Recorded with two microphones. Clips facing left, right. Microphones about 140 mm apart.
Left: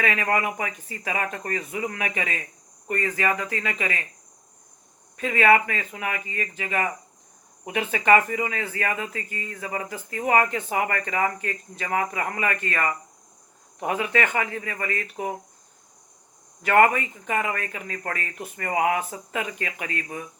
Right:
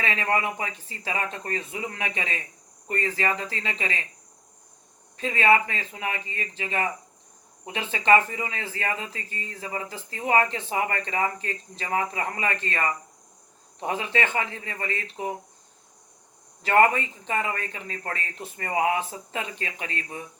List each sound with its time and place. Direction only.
0.0 s speech: 25° right (ahead or behind)
5.1 s speech: 30° right (ahead or behind)
16.9 s speech: 30° right (ahead or behind)